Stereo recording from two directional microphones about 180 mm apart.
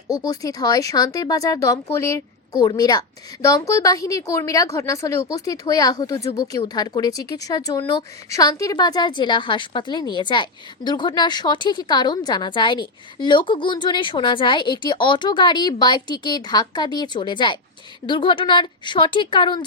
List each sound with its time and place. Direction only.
0.1 s a woman's voice: 20° left (ahead or behind)